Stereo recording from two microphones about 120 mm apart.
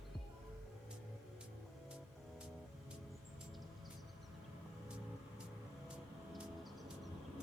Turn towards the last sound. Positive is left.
turn(degrees=0)  # may be behind; listen again after turning